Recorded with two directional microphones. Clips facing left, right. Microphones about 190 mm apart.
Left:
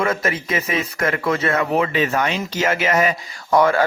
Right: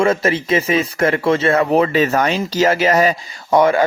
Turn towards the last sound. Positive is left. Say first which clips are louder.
# right 3 dB
turn(degrees=-20)  # may be behind; listen again after turning